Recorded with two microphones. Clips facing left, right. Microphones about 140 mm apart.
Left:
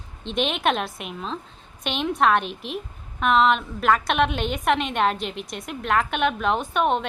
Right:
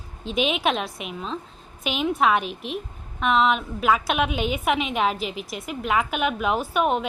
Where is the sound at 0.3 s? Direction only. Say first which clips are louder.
Even; 5° right (ahead or behind).